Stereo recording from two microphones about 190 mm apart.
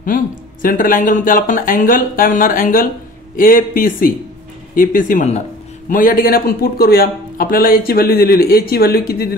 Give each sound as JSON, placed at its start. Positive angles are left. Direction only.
{"t": 0.0, "sound": "a man's voice", "side_deg": 45}